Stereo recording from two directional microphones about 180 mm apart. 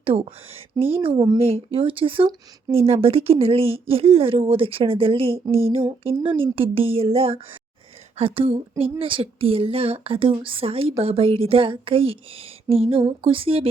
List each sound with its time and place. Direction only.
0.0 s speech: 30° right (ahead or behind)
5.5 s a sound: 15° right (ahead or behind)
6.4 s speech: 30° right (ahead or behind)